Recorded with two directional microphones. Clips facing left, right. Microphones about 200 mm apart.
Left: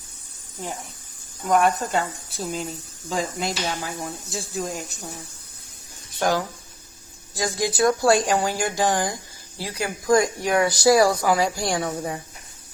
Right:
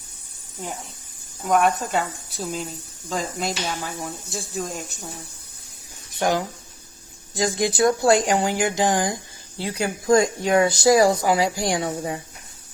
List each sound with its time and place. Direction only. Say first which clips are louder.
1.5 s speech: even; centre (ahead or behind)
6.1 s speech: right 1 dB; 20° right (ahead or behind)